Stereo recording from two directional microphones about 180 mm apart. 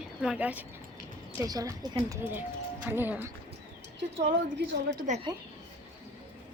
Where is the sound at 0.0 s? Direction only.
5° right (ahead or behind).